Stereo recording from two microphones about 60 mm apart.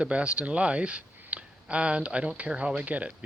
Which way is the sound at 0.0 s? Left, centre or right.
Centre.